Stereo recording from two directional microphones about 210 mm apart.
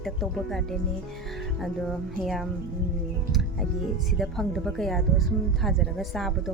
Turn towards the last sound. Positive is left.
turn(degrees=0)  # may be behind; listen again after turning